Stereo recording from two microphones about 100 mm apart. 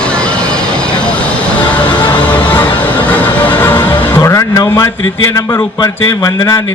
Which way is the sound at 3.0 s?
15° left (ahead or behind).